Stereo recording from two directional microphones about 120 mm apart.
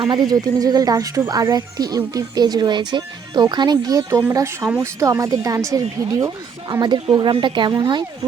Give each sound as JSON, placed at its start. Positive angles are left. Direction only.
{"t": 0.0, "sound": "speech", "side_deg": -35}